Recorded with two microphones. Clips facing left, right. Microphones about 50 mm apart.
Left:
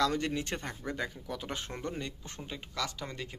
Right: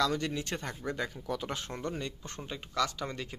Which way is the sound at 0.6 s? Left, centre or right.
Centre.